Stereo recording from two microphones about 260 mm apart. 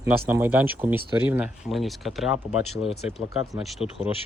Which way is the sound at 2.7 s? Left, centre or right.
Left.